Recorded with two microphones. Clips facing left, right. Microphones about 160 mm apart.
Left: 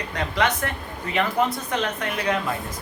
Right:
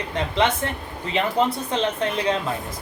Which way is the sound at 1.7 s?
25° right (ahead or behind).